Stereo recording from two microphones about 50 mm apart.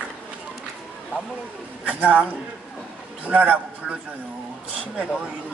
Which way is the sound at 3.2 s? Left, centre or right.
Right.